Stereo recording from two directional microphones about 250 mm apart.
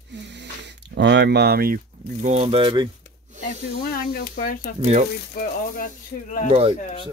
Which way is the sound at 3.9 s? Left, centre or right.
Left.